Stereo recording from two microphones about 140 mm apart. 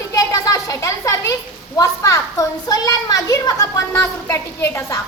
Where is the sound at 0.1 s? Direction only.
25° left (ahead or behind).